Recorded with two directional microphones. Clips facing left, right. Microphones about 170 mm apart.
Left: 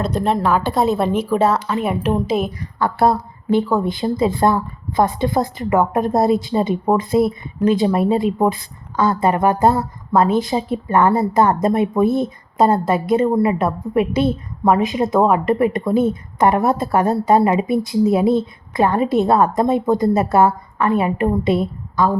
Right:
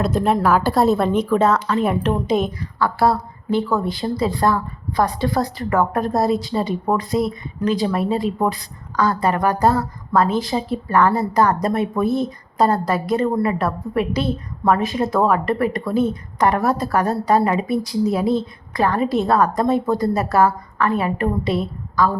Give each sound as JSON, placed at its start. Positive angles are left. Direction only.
{"t": 0.4, "sound": "a woman's voice", "side_deg": -5}
{"t": 1.5, "sound": "a woman's voice", "side_deg": 20}
{"t": 1.8, "sound": "a woman's voice", "side_deg": 0}
{"t": 2.6, "sound": "a woman's voice", "side_deg": 20}